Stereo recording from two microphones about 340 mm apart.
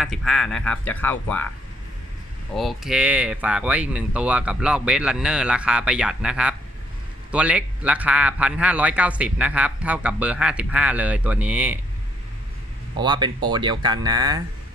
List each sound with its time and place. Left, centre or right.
0.0 s speech: centre
2.5 s speech: centre
12.9 s speech: centre